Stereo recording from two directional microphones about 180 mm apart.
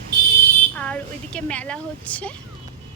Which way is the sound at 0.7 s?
5° left (ahead or behind).